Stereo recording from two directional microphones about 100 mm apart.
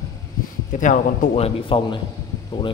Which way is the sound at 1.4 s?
75° left (ahead or behind).